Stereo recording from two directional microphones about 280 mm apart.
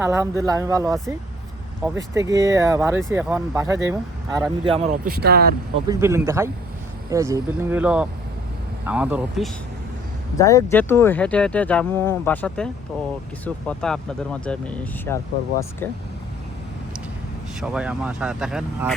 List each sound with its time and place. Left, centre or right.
0.0 s speech: centre; by 5.5 s right
5.9 s speech: centre
10.3 s speech: centre
17.6 s speech: centre